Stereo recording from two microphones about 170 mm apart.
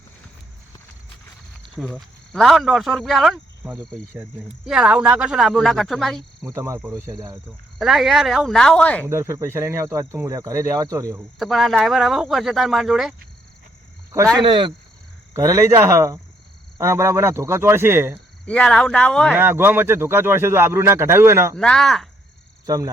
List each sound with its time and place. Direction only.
1.7 s speech: centre (ahead or behind)
6.4 s speech: 15° right (ahead or behind)
7.1 s speech: 25° right (ahead or behind)
7.8 s speech: centre (ahead or behind)
9.0 s speech: 15° right (ahead or behind)
11.3 s speech: centre (ahead or behind)
14.3 s speech: 30° right (ahead or behind)
15.4 s speech: 20° right (ahead or behind)
18.4 s speech: 5° left (ahead or behind)
19.3 s speech: 10° right (ahead or behind)
21.5 s speech: 5° left (ahead or behind)
22.6 s speech: 20° right (ahead or behind)